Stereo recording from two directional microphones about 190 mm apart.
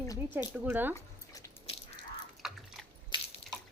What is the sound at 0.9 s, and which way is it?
Drip, 15° left (ahead or behind).